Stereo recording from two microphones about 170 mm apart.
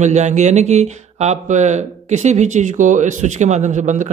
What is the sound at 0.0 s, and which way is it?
Speech, 45° right (ahead or behind).